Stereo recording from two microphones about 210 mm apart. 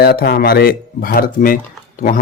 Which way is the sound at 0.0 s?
50° left (ahead or behind).